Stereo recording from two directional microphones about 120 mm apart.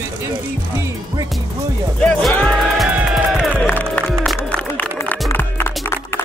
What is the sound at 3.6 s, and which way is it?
Music, 10° left (ahead or behind).